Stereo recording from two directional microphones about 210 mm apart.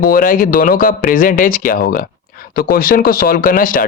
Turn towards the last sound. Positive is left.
turn(degrees=40)  # may be behind; listen again after turning